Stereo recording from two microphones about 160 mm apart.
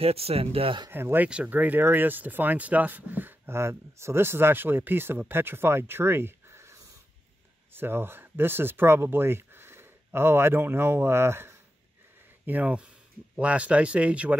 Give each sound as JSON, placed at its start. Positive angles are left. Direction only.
{"t": 0.0, "sound": "speech", "side_deg": -40}
{"t": 0.8, "sound": "speech", "side_deg": -15}